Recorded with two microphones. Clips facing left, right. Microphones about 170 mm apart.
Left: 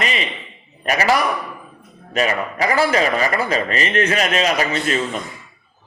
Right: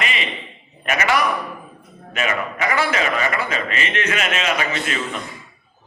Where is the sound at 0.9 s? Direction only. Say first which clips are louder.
Left 2 dB; 35° left (ahead or behind).